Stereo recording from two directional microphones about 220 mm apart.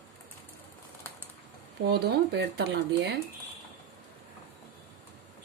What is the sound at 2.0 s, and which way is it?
A woman's voice, 50° right (ahead or behind).